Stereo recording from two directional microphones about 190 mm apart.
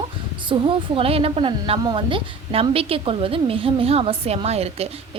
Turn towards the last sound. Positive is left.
turn(degrees=-30)  # may be behind; listen again after turning